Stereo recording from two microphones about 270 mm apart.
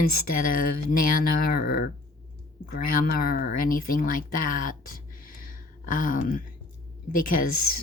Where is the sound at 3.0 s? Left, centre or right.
Left.